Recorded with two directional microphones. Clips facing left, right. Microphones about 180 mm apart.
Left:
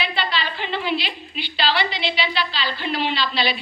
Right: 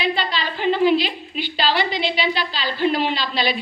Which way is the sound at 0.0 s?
40° right (ahead or behind).